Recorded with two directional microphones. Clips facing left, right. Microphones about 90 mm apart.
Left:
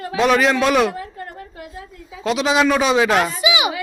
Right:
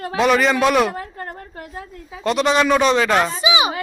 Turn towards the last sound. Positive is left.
turn(degrees=-30)  # may be behind; listen again after turning